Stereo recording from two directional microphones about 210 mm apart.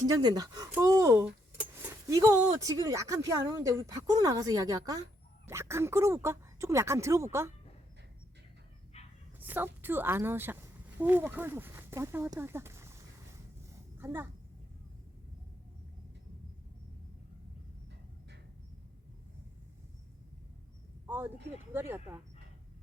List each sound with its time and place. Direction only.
0.1 s speech: 20° right (ahead or behind)
8.9 s bow-wow: 30° left (ahead or behind)
9.4 s a woman's voice: 10° right (ahead or behind)
13.7 s a sound: 15° right (ahead or behind)
21.1 s speech: 10° right (ahead or behind)